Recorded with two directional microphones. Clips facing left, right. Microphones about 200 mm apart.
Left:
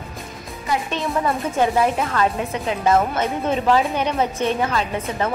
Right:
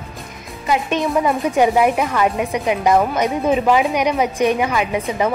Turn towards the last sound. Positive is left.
turn(degrees=-10)  # may be behind; listen again after turning